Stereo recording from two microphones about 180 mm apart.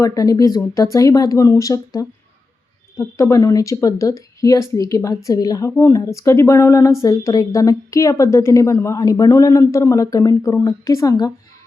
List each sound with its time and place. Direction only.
0.0 s a woman's voice: 20° left (ahead or behind)